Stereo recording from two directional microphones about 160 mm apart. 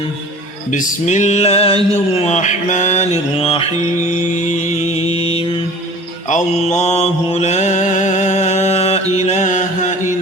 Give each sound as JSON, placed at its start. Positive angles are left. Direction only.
{"t": 0.7, "sound": "a sound", "side_deg": 50}
{"t": 3.3, "sound": "mantra", "side_deg": 35}
{"t": 4.1, "sound": "mantra", "side_deg": 50}
{"t": 6.2, "sound": "mantra", "side_deg": 45}